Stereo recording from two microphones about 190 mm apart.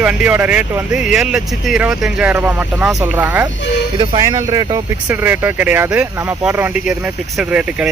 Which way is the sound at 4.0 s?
20° right (ahead or behind).